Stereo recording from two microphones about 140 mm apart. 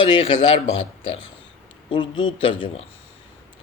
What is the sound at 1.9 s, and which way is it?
Speech, 35° left (ahead or behind).